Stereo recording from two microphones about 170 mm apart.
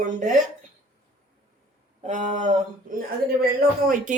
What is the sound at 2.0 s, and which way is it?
Speech, 45° right (ahead or behind).